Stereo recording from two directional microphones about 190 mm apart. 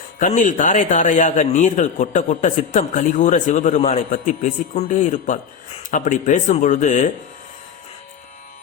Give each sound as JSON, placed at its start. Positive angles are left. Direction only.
{"t": 0.2, "sound": "a man's voice", "side_deg": 40}